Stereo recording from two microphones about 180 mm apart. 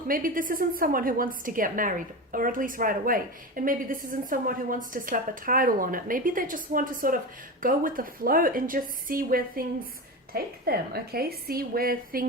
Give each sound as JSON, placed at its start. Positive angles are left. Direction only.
{"t": 0.1, "sound": "a woman's voice", "side_deg": -50}